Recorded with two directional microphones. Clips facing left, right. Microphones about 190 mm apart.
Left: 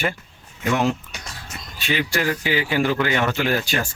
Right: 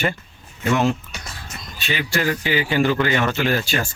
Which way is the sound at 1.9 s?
10° left (ahead or behind).